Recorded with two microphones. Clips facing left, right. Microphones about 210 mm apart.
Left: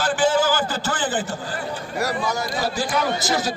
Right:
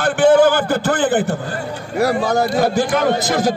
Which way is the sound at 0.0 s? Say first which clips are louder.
Right 8 dB; 60° right (ahead or behind).